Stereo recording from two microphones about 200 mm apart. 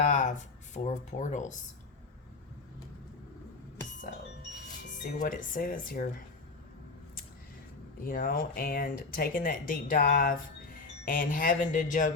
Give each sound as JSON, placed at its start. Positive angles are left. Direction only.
{"t": 0.1, "sound": "speech", "side_deg": 40}
{"t": 5.2, "sound": "speech", "side_deg": 40}
{"t": 8.0, "sound": "speech", "side_deg": 45}